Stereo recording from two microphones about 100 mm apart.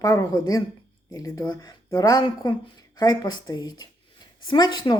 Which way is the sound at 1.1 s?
35° left (ahead or behind).